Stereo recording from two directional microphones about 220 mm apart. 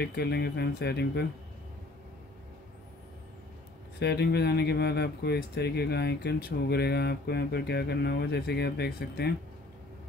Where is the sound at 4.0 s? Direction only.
50° left (ahead or behind).